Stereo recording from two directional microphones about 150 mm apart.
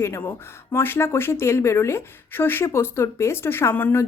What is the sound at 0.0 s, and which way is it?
Speech, 15° left (ahead or behind).